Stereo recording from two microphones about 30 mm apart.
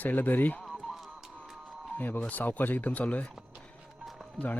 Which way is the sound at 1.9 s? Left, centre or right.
Left.